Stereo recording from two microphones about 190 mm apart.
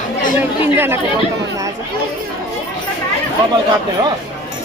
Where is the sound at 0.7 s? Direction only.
10° right (ahead or behind).